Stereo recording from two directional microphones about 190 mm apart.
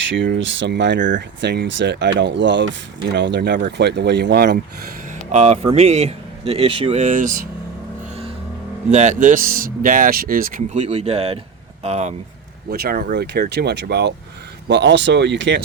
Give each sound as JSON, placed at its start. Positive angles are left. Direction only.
{"t": 0.1, "sound": "speech", "side_deg": -75}
{"t": 5.3, "sound": "speech", "side_deg": -35}
{"t": 8.9, "sound": "speech", "side_deg": -40}
{"t": 12.7, "sound": "speech", "side_deg": -55}